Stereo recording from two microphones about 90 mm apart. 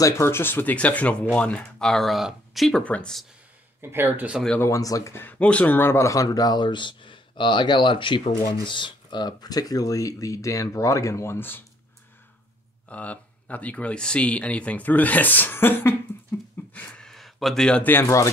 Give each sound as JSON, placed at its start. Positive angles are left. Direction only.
{"t": 0.0, "sound": "speech", "side_deg": 30}
{"t": 2.8, "sound": "speech", "side_deg": 15}
{"t": 3.8, "sound": "speech", "side_deg": -25}
{"t": 4.6, "sound": "speech", "side_deg": 35}
{"t": 5.1, "sound": "speech", "side_deg": 20}
{"t": 12.8, "sound": "speech", "side_deg": 15}
{"t": 17.0, "sound": "a sound", "side_deg": 0}
{"t": 18.0, "sound": "speech", "side_deg": 35}